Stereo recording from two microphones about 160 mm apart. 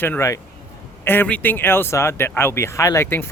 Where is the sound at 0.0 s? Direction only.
15° left (ahead or behind).